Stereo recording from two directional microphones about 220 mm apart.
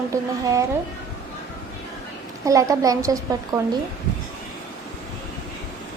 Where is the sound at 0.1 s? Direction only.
15° right (ahead or behind).